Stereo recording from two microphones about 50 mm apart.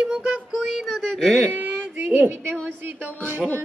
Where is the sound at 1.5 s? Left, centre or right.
Right.